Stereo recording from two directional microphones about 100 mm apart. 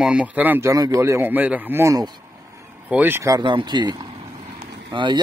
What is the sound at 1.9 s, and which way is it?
Speech, 45° right (ahead or behind).